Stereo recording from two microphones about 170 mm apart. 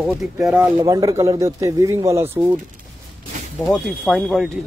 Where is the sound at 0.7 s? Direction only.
20° right (ahead or behind).